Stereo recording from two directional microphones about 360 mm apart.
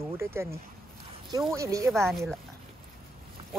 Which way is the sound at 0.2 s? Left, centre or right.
Centre.